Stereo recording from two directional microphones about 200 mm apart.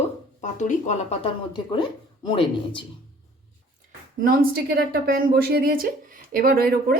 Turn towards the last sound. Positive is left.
turn(degrees=-50)  # may be behind; listen again after turning